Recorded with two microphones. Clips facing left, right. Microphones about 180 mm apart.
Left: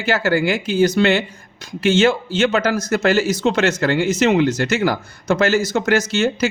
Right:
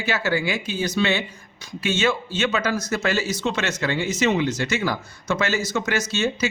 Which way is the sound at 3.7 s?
70° left (ahead or behind).